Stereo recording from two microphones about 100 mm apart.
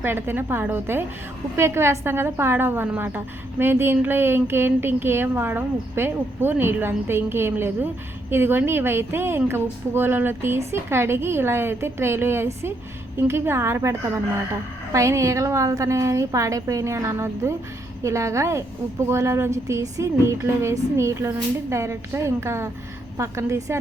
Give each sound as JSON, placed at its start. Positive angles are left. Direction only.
{"t": 0.0, "sound": "a woman's voice", "side_deg": -20}
{"t": 14.9, "sound": "a woman's voice", "side_deg": -30}